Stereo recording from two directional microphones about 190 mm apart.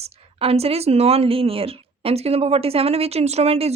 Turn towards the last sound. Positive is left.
turn(degrees=-30)  # may be behind; listen again after turning